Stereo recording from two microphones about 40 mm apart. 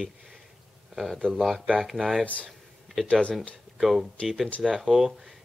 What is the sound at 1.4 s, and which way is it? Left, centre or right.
Speech, centre.